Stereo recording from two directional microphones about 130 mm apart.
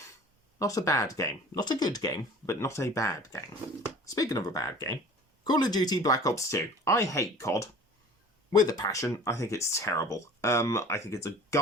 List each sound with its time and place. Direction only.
0.6 s speech: 25° left (ahead or behind)